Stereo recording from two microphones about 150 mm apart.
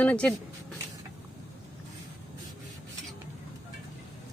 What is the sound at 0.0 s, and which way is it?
Speech, 10° left (ahead or behind).